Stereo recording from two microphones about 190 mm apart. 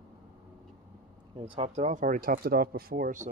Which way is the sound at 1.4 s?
30° right (ahead or behind).